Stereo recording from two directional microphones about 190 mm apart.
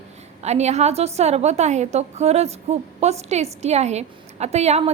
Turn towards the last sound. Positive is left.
turn(degrees=-35)  # may be behind; listen again after turning